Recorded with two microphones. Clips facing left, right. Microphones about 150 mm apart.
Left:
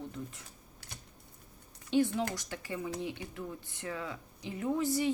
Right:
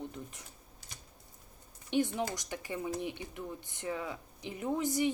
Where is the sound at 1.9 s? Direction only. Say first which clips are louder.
Left 2 dB; 15° right (ahead or behind).